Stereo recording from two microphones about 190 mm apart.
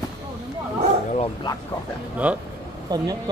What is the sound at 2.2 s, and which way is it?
Speech, 5° right (ahead or behind).